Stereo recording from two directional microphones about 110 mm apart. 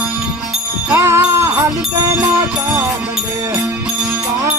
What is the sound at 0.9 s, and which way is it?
Jingle bell, 25° right (ahead or behind).